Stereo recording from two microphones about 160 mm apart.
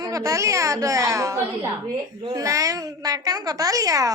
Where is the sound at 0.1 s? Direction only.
20° right (ahead or behind).